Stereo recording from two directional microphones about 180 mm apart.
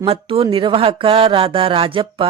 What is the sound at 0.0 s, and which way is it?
Speech, 30° right (ahead or behind).